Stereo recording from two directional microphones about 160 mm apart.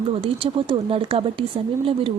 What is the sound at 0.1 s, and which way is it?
Speech, 35° right (ahead or behind).